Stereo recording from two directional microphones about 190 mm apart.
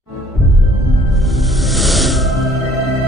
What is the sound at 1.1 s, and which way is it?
Music, centre (ahead or behind).